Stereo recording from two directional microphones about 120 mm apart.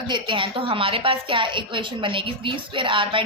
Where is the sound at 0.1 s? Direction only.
45° right (ahead or behind).